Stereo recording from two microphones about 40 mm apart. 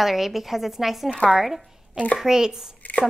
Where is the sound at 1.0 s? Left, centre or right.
Left.